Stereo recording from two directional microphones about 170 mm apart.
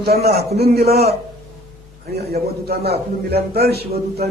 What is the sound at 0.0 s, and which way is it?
A man's voice, 70° right (ahead or behind).